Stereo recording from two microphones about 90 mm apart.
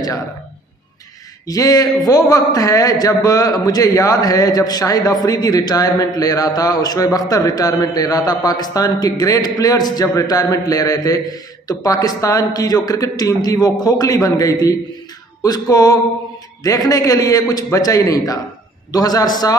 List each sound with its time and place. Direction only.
1.5 s a man's voice: 40° left (ahead or behind)